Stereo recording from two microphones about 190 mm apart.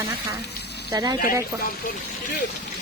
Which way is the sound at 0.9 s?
20° right (ahead or behind).